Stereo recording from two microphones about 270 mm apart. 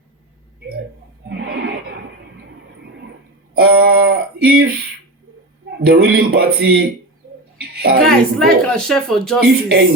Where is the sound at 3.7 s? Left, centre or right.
Right.